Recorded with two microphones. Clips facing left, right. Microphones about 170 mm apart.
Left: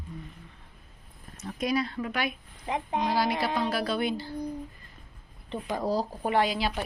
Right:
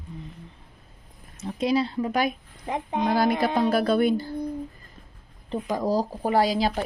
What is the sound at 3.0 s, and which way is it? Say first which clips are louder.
Speech: right 6 dB; 50° right (ahead or behind).